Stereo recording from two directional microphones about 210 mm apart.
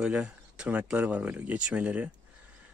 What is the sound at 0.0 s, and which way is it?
Speech, 5° right (ahead or behind).